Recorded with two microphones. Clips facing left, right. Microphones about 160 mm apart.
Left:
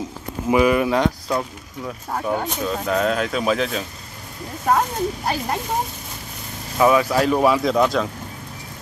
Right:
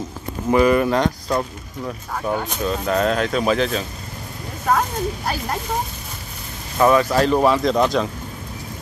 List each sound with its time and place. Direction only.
0.5 s speech: 5° left (ahead or behind)
5.2 s speech: 20° left (ahead or behind)
6.8 s speech: 5° left (ahead or behind)